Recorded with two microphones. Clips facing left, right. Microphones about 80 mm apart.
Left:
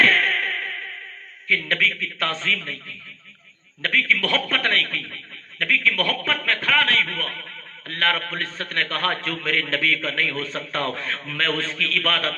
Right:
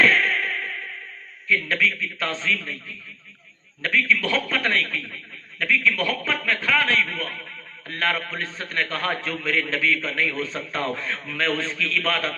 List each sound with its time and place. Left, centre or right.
0.1 s music: left
1.5 s a man's voice: left
3.8 s a man's voice: left